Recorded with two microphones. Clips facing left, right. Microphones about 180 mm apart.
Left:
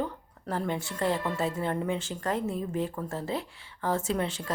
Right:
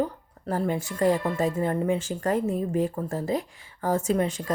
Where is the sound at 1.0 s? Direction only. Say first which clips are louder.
Right 6 dB; 45° right (ahead or behind).